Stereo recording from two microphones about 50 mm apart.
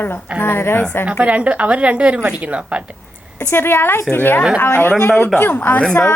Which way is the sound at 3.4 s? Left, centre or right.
Left.